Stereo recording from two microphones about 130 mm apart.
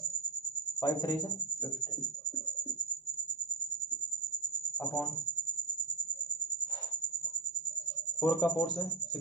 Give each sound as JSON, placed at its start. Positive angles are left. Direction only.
{"t": 0.8, "sound": "speech", "side_deg": 30}
{"t": 8.2, "sound": "speech", "side_deg": 30}